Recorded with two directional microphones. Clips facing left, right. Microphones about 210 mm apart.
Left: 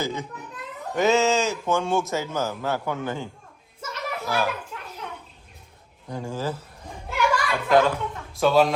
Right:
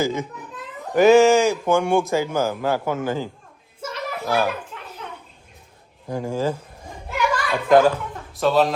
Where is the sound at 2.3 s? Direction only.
30° right (ahead or behind).